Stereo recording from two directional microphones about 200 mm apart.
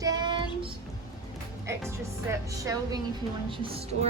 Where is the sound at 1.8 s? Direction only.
15° right (ahead or behind).